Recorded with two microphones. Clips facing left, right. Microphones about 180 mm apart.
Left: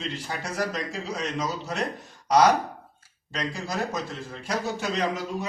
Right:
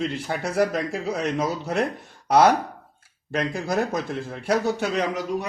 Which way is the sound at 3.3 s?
55° right (ahead or behind).